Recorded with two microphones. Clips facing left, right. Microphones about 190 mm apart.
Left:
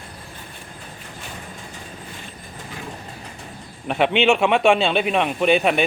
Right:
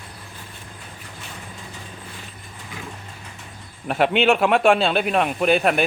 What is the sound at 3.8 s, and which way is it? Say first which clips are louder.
A man's voice: even; centre (ahead or behind).